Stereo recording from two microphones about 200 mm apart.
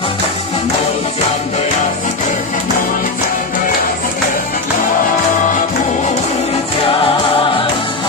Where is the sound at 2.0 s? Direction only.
40° left (ahead or behind).